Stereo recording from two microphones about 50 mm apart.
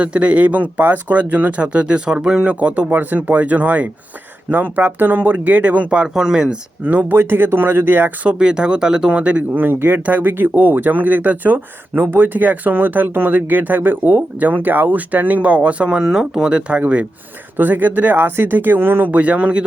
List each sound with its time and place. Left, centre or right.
0.0 s speech: right
6.1 s speech: centre
7.2 s speech: right
8.2 s speech: right
9.6 s speech: right
16.0 s speech: centre
17.6 s speech: right
19.1 s speech: right